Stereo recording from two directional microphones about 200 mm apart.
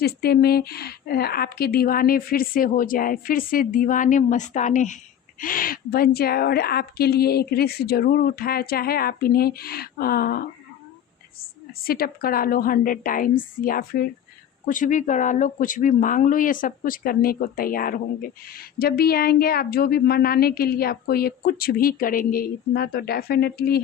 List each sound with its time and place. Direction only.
0.0 s speech: 50° left (ahead or behind)
11.8 s speech: 50° left (ahead or behind)